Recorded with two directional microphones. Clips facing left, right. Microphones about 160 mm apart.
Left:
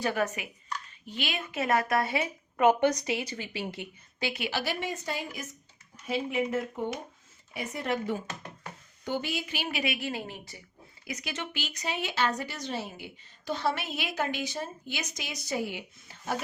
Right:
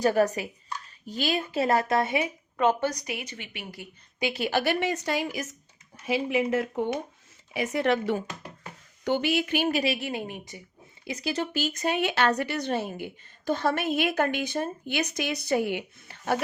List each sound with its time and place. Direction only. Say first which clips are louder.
0.0 s speech: right 7 dB; 40° right (ahead or behind); by 2.2 s 20° right (ahead or behind)
2.6 s a woman's voice: left 2 dB; 10° left (ahead or behind)
2.9 s a woman's voice: left 4 dB; 25° left (ahead or behind)
4.4 s a woman's voice: right 9 dB; 55° right (ahead or behind); by 9.9 s 40° right (ahead or behind)
9.9 s a woman's voice: right 3 dB; 20° right (ahead or behind)
11.0 s speech: right 7 dB; 30° right (ahead or behind); by 16.4 s 65° right (ahead or behind)